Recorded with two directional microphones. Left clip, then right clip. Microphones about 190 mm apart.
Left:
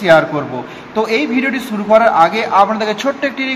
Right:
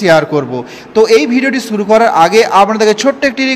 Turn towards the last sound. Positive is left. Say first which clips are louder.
# right 6 dB
turn(degrees=-40)  # may be behind; listen again after turning